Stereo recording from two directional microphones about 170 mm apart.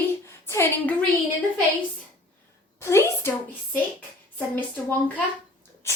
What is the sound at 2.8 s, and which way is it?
Speech, 15° left (ahead or behind).